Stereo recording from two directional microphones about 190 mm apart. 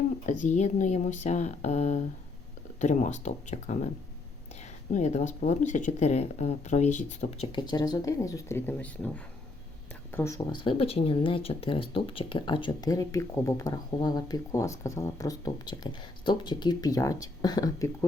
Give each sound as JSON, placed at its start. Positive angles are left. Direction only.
{"t": 0.3, "sound": "speech", "side_deg": 40}
{"t": 4.9, "sound": "speech", "side_deg": 40}